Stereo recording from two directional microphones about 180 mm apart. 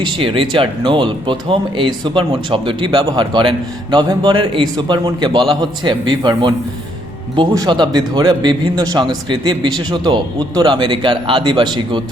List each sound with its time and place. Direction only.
0.0 s a man's voice: 25° right (ahead or behind)